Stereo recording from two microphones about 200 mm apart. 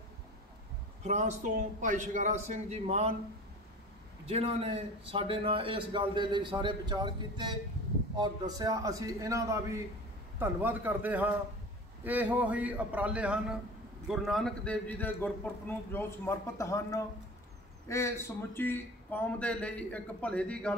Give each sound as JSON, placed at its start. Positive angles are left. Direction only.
{"t": 1.0, "sound": "a man's voice", "side_deg": -35}
{"t": 4.3, "sound": "a man's voice", "side_deg": -30}